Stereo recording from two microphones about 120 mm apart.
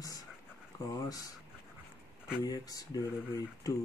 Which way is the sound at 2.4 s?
30° left (ahead or behind).